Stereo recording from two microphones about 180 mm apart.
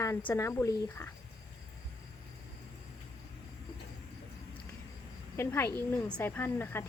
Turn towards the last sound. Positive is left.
turn(degrees=10)  # may be behind; listen again after turning